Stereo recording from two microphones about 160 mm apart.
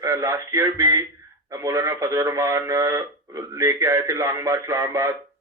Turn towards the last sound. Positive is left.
turn(degrees=-20)  # may be behind; listen again after turning